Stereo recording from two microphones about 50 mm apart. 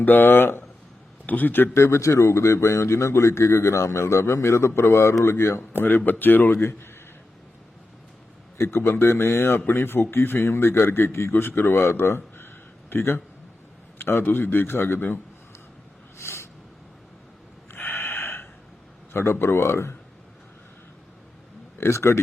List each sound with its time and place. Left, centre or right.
0.0 s a man's voice: left
1.7 s speech: left
6.1 s a man's voice: left
8.6 s a man's voice: left
14.0 s a man's voice: left
16.1 s a sound: left
17.7 s gasp: left
19.1 s speech: left
21.8 s speech: left